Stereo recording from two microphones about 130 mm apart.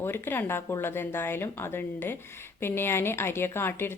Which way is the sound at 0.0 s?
15° left (ahead or behind).